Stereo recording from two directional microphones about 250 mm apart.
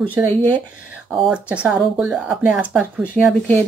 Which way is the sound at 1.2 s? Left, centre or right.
Centre.